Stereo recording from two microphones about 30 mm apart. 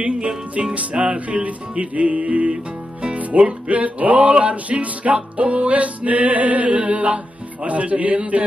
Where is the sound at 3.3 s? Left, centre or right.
Right.